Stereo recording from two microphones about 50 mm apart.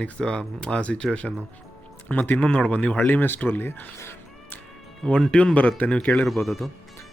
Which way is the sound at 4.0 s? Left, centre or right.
Left.